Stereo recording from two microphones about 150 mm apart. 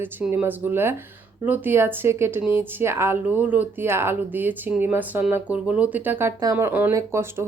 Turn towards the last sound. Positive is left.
turn(degrees=-15)  # may be behind; listen again after turning